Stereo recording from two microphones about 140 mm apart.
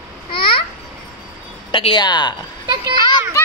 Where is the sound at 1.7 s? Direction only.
35° left (ahead or behind).